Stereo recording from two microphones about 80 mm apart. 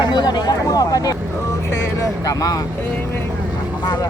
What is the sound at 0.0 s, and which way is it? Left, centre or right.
Speech, left.